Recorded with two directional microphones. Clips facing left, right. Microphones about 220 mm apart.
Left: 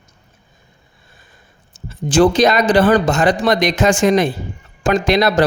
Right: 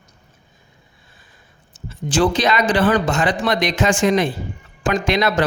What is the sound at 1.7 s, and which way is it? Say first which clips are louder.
A man's voice: left 6 dB; 45° left (ahead or behind).